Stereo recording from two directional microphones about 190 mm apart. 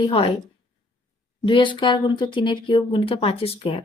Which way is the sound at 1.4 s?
25° left (ahead or behind).